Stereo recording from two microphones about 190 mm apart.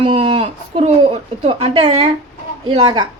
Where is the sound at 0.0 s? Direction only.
30° right (ahead or behind).